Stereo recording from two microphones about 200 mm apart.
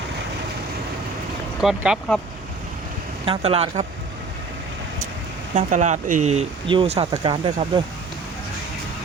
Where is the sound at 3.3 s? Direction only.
30° right (ahead or behind).